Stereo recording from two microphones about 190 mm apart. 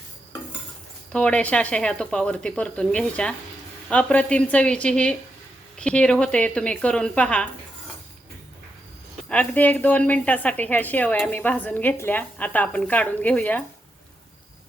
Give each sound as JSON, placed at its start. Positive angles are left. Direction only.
{"t": 1.1, "sound": "speech", "side_deg": 5}
{"t": 9.3, "sound": "a woman's voice", "side_deg": 10}